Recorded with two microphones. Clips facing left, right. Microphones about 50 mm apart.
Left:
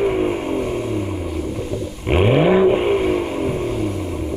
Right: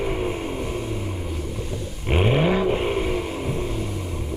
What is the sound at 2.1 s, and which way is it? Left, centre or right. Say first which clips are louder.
Vehicle: left 6 dB; centre.